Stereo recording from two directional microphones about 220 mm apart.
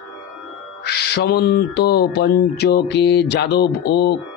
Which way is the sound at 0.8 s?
50° left (ahead or behind).